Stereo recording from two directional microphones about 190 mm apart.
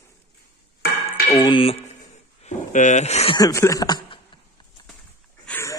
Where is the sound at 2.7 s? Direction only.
40° left (ahead or behind).